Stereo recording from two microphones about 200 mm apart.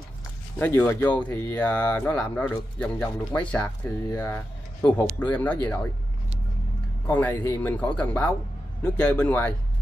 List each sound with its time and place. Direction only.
0.6 s speech: 10° left (ahead or behind)
7.1 s speech: 10° left (ahead or behind)